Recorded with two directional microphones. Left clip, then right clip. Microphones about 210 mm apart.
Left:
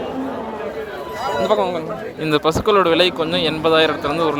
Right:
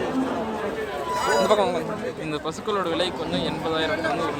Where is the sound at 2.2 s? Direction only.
40° left (ahead or behind).